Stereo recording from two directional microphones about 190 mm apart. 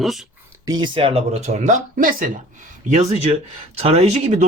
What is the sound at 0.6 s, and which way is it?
Speech, 20° right (ahead or behind).